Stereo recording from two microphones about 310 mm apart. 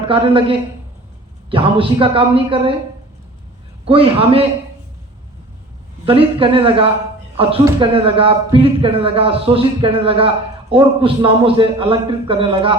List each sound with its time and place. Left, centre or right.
0.1 s speech: centre
3.8 s speech: centre
6.1 s speech: centre